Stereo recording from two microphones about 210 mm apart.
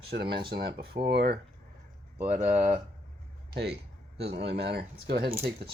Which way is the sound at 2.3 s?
35° right (ahead or behind).